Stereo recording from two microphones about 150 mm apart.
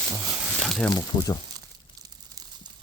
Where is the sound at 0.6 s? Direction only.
Centre (ahead or behind).